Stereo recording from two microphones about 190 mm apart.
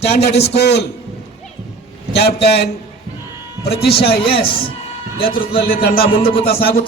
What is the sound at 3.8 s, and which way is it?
Speech, 55° left (ahead or behind).